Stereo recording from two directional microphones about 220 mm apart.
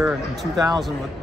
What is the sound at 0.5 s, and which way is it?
Speech, 15° right (ahead or behind).